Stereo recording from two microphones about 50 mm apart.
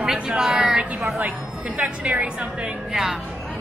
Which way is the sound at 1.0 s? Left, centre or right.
Right.